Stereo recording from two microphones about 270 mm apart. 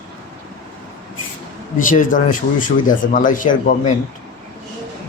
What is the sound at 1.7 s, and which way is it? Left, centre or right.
Speech, left.